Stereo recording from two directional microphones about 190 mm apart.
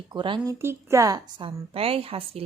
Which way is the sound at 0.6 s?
15° right (ahead or behind).